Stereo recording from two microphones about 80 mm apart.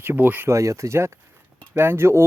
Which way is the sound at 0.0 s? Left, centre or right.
Right.